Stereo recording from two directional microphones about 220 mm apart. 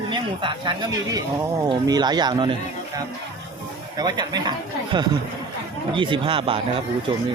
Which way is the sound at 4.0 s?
20° right (ahead or behind).